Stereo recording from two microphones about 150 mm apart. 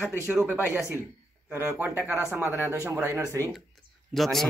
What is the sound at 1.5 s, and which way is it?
Speech, 15° right (ahead or behind).